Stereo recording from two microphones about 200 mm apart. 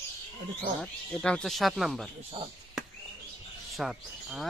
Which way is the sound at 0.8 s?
5° left (ahead or behind).